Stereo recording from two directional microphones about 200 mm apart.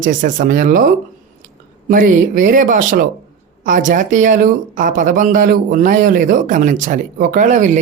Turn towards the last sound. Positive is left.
turn(degrees=-40)  # may be behind; listen again after turning